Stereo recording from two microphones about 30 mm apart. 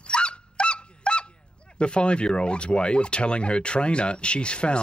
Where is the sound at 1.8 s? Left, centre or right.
Left.